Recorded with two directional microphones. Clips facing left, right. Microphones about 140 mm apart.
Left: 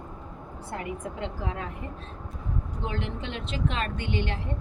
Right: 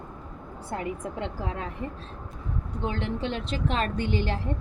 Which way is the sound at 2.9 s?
35° right (ahead or behind).